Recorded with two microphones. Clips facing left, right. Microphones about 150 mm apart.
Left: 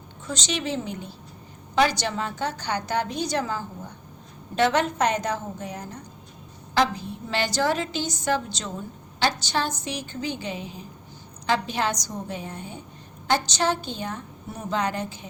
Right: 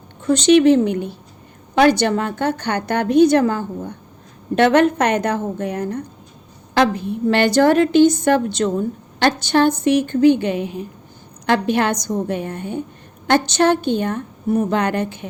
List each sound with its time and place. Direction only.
0.3 s a woman's voice: 60° right (ahead or behind)